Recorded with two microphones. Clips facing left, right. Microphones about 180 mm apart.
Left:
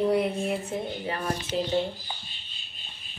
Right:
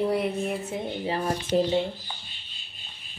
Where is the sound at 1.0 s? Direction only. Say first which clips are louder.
Right 3 dB; 30° right (ahead or behind).